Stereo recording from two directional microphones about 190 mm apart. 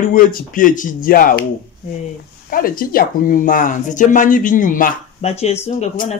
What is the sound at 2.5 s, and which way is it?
Speech, 50° left (ahead or behind).